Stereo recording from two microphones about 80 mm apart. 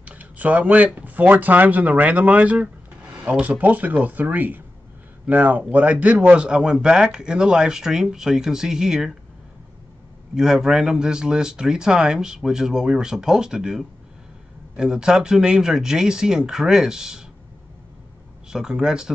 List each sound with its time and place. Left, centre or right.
0.0 s speech: centre
10.3 s speech: centre
18.5 s speech: centre